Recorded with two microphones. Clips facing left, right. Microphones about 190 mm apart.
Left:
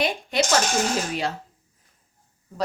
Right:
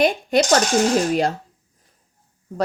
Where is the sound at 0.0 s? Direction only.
45° right (ahead or behind).